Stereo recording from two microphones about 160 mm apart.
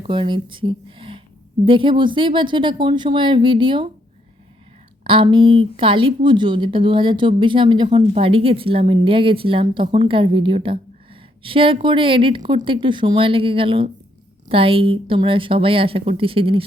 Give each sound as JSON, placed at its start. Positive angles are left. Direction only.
{"t": 0.1, "sound": "speech", "side_deg": -30}
{"t": 5.0, "sound": "speech", "side_deg": -35}